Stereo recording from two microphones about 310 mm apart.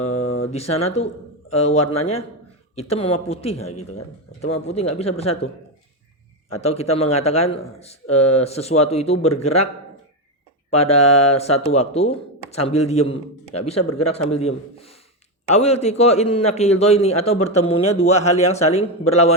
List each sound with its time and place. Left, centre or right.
0.1 s a sound: centre
0.8 s speech: centre
6.6 s speech: centre
10.7 s speech: centre